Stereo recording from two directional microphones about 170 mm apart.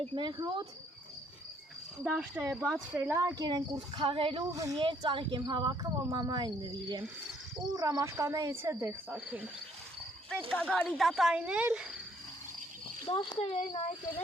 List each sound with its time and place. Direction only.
0.0 s speech: 30° right (ahead or behind)
2.0 s speech: 10° right (ahead or behind)
2.6 s speech: centre (ahead or behind)
3.0 s speech: 20° right (ahead or behind)
4.5 s speech: 20° right (ahead or behind)
10.5 s speech: 5° left (ahead or behind)
13.1 s speech: 25° left (ahead or behind)